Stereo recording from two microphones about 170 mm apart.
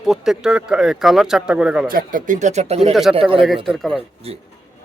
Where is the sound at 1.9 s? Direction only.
55° right (ahead or behind); by 2.9 s 40° right (ahead or behind).